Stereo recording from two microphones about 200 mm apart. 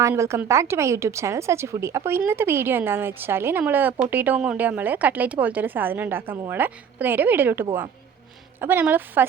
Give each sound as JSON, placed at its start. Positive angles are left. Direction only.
{"t": 0.0, "sound": "speech", "side_deg": -15}